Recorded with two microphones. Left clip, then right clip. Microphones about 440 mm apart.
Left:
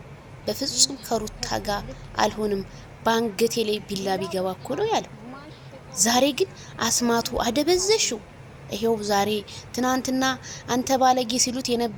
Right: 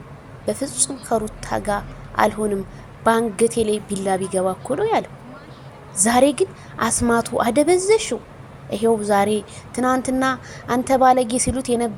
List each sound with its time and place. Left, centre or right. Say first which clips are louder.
0.4 s speech: left 1 dB; left